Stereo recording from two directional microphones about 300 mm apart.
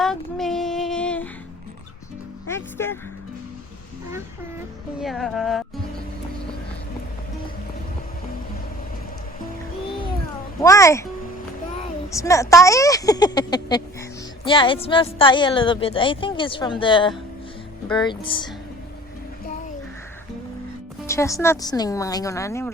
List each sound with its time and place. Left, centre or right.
0.0 s child singing: centre
2.5 s a woman's voice: centre
4.9 s speech: centre
10.6 s a woman's voice: centre
12.1 s a woman's voice: centre
21.1 s a woman's voice: centre